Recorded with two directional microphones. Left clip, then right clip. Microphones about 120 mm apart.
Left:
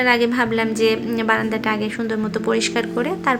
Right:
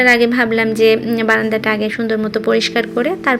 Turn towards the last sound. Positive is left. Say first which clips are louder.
# right 4 dB
turn(degrees=-25)  # may be behind; listen again after turning